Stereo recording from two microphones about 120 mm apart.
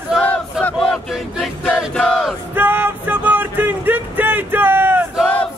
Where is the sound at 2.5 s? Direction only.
15° right (ahead or behind).